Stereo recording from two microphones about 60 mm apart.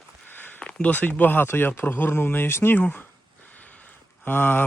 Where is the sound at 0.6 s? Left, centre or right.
Centre; by 2.8 s left.